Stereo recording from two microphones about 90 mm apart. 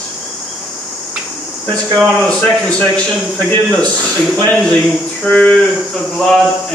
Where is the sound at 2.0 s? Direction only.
5° left (ahead or behind).